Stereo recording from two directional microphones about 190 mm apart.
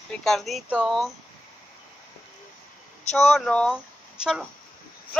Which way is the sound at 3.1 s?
Centre (ahead or behind).